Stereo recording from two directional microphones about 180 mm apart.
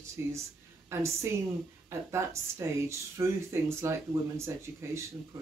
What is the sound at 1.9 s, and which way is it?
Speech, 15° right (ahead or behind).